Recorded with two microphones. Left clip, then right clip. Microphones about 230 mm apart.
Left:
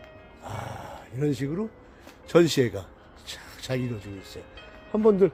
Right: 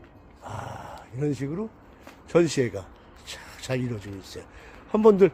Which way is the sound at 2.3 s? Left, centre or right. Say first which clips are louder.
Left 2 dB; left.